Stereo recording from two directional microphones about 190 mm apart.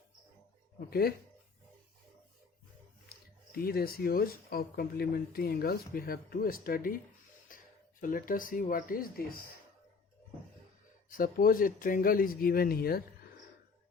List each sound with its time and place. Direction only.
0.9 s speech: 55° left (ahead or behind)
3.5 s speech: 50° left (ahead or behind)
8.0 s speech: 45° left (ahead or behind)
11.1 s speech: 50° left (ahead or behind)